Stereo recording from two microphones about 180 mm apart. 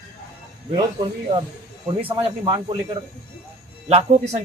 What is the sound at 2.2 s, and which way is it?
Speech, 25° right (ahead or behind).